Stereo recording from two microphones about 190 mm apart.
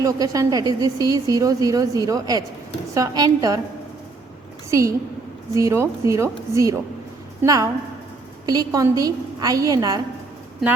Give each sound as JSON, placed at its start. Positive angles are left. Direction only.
{"t": 0.0, "sound": "a woman's voice", "side_deg": -20}
{"t": 4.7, "sound": "a woman's voice", "side_deg": -15}